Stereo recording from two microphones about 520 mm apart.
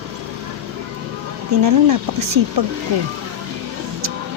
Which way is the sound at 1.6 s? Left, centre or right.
Right.